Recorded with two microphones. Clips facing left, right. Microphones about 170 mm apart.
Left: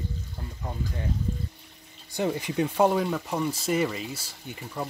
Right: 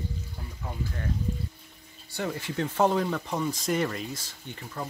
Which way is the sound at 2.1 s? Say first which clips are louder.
Left 4 dB; 20° left (ahead or behind).